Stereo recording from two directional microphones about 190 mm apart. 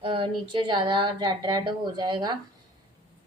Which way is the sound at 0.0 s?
25° right (ahead or behind).